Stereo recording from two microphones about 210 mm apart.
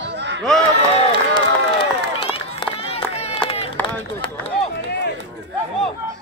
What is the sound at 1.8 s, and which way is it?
Run, 25° left (ahead or behind).